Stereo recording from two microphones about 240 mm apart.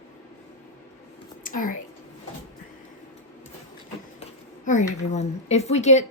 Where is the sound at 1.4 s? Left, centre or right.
Left.